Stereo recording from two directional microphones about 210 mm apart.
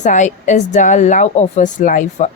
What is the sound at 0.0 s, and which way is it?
Speech, 35° left (ahead or behind).